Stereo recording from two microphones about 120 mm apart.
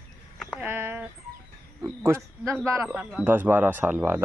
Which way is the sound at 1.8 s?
20° right (ahead or behind).